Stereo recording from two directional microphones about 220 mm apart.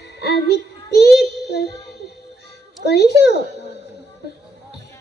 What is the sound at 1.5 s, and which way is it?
Music, 50° left (ahead or behind).